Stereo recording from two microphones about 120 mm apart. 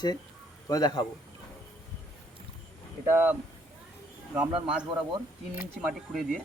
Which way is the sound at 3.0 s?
15° right (ahead or behind).